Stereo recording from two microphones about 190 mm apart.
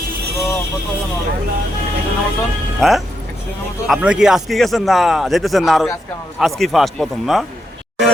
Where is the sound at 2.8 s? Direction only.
Centre (ahead or behind).